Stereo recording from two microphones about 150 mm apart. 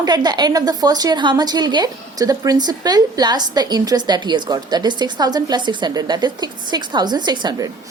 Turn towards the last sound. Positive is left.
turn(degrees=-25)  # may be behind; listen again after turning